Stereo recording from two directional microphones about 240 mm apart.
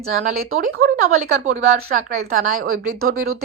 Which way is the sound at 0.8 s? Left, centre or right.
Right.